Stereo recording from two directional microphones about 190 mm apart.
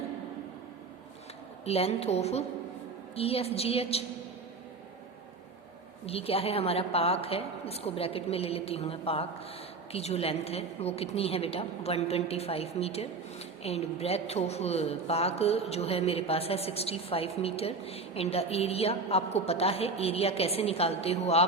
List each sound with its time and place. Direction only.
1.6 s a woman's voice: 30° left (ahead or behind)
6.1 s a woman's voice: 30° left (ahead or behind)